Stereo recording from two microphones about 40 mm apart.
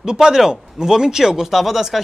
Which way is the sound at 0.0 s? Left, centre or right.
Centre.